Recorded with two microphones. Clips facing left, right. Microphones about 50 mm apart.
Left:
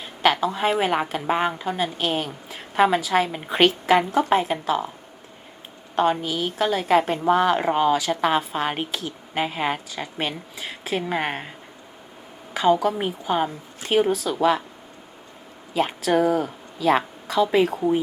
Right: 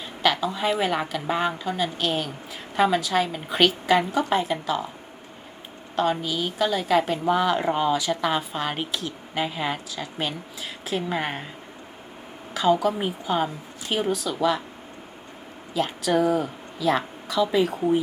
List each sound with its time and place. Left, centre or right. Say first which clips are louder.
0.2 s a woman's voice: left 3 dB; left
4.4 s speech: left 2 dB; centre
6.0 s a woman's voice: left 3 dB; left
7.3 s speech: left 4 dB; left
8.1 s speech: left 3 dB; left
12.5 s speech: left 2 dB; centre
16.1 s speech: left 1 dB; left
17.4 s speech: left 2 dB; centre